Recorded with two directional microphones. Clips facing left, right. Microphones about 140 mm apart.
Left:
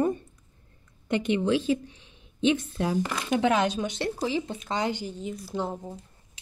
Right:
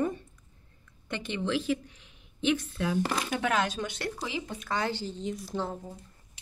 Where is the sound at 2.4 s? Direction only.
25° left (ahead or behind).